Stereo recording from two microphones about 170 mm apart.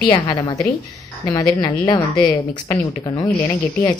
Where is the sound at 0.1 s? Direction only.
25° left (ahead or behind).